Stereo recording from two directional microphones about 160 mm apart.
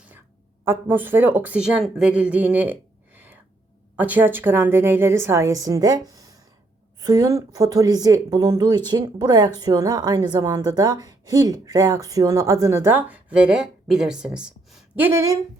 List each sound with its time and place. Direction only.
0.6 s a woman's voice: 15° right (ahead or behind)
3.9 s a woman's voice: 10° right (ahead or behind)
14.9 s a woman's voice: 15° right (ahead or behind)